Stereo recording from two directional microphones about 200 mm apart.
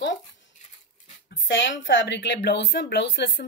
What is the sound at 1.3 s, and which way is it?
A woman's voice, 70° left (ahead or behind).